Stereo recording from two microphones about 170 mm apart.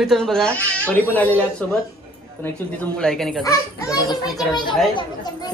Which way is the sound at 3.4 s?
20° left (ahead or behind).